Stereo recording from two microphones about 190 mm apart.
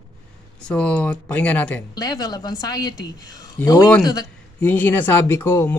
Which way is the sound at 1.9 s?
20° left (ahead or behind).